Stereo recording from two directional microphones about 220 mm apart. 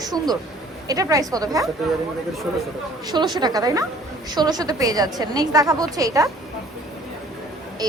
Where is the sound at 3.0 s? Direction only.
20° right (ahead or behind).